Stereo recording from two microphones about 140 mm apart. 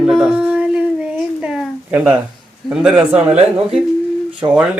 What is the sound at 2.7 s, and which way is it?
Speech, 5° right (ahead or behind).